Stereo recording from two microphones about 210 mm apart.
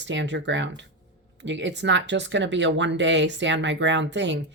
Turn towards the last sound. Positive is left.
turn(degrees=-60)  # may be behind; listen again after turning